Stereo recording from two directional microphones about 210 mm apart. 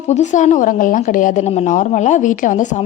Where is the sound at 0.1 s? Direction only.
35° left (ahead or behind).